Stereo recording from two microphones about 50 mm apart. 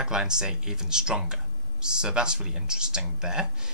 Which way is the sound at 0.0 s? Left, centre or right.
Centre.